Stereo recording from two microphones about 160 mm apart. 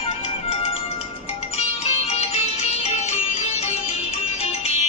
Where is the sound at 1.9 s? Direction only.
40° left (ahead or behind).